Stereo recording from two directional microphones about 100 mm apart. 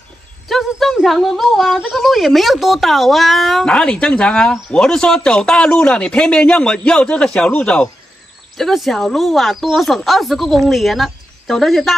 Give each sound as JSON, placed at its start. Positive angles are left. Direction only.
{"t": 0.5, "sound": "speech", "side_deg": 0}